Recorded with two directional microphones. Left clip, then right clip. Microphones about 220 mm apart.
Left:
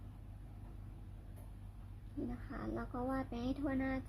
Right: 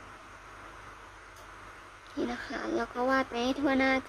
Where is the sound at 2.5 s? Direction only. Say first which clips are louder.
Right 11 dB; 25° right (ahead or behind).